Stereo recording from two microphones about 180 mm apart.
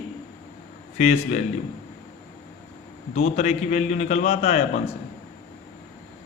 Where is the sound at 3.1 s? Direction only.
40° left (ahead or behind).